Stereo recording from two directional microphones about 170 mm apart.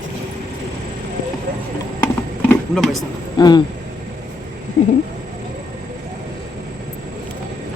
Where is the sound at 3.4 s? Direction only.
25° left (ahead or behind).